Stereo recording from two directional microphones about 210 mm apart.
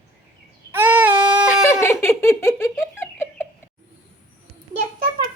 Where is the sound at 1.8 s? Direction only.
10° left (ahead or behind).